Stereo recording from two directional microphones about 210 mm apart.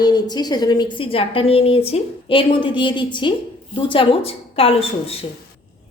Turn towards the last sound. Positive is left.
turn(degrees=25)  # may be behind; listen again after turning